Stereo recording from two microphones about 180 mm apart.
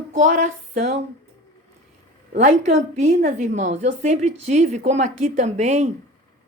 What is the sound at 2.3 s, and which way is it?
A woman's voice, 40° right (ahead or behind).